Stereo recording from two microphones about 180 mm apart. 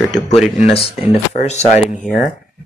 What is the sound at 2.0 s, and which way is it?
Speech, 5° right (ahead or behind).